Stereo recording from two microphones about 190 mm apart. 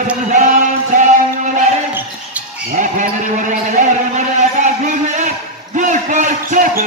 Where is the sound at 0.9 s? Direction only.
40° right (ahead or behind).